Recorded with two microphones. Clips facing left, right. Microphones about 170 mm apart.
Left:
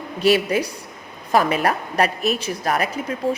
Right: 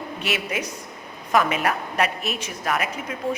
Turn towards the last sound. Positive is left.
turn(degrees=35)  # may be behind; listen again after turning